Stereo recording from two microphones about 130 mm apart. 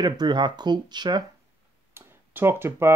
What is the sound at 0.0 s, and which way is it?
Speech, 35° right (ahead or behind).